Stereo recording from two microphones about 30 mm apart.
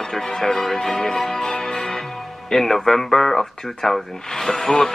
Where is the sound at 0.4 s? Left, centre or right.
Centre.